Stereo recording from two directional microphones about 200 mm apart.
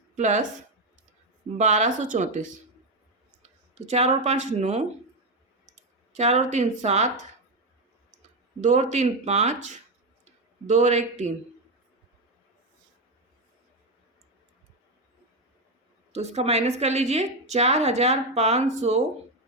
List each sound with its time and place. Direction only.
0.2 s a woman's voice: 40° right (ahead or behind)
1.5 s a woman's voice: 35° right (ahead or behind)
3.8 s a woman's voice: 35° right (ahead or behind)
8.6 s a woman's voice: 35° right (ahead or behind)
16.1 s a woman's voice: 35° right (ahead or behind)